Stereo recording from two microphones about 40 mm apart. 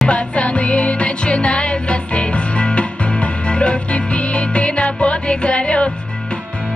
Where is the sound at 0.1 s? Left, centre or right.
Left.